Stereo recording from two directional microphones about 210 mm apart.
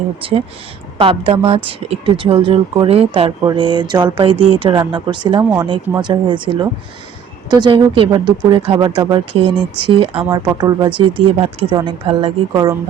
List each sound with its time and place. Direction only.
0.2 s speech: 25° right (ahead or behind)